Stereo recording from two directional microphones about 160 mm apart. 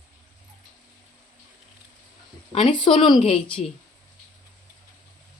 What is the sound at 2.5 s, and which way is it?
Speech, 30° left (ahead or behind).